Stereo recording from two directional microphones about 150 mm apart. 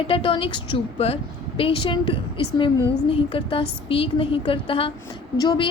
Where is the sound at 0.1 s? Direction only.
35° left (ahead or behind).